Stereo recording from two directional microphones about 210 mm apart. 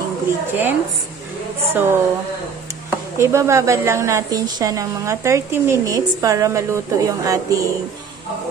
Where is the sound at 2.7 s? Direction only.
15° right (ahead or behind).